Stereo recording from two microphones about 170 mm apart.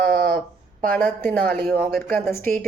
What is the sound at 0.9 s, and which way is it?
Speech, 10° left (ahead or behind).